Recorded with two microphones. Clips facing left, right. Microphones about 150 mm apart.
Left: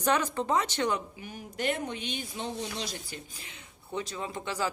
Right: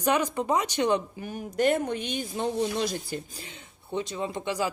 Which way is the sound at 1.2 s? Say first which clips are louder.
Right 8 dB; 45° right (ahead or behind).